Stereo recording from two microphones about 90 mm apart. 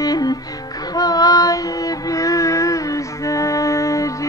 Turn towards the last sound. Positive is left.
turn(degrees=35)  # may be behind; listen again after turning